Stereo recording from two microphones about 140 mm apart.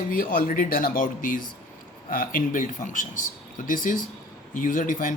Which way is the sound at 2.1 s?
85° left.